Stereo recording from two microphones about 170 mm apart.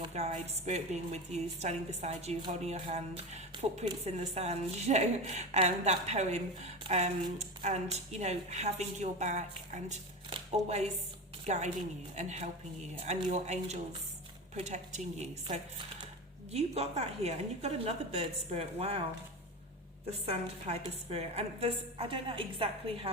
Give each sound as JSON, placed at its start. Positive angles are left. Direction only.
{"t": 0.1, "sound": "a woman's voice", "side_deg": -40}
{"t": 20.2, "sound": "a woman's voice", "side_deg": -35}